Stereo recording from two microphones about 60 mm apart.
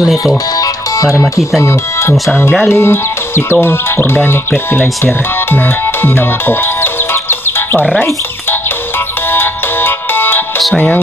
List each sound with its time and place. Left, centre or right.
0.6 s music: left
1.6 s speech: left
2.7 s music: left
3.6 s speech: left
9.3 s ringtone: left